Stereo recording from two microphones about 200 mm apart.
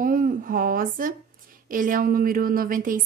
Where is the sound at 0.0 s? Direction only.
45° right (ahead or behind).